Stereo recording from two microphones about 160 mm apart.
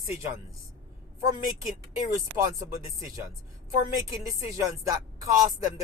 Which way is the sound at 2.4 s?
20° right (ahead or behind).